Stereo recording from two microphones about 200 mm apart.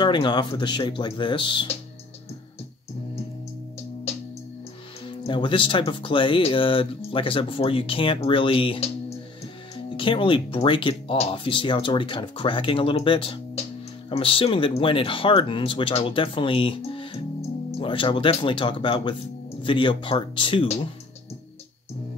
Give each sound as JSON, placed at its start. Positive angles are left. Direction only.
{"t": 0.0, "sound": "speech", "side_deg": 20}
{"t": 5.0, "sound": "speech", "side_deg": 25}
{"t": 9.9, "sound": "speech", "side_deg": 25}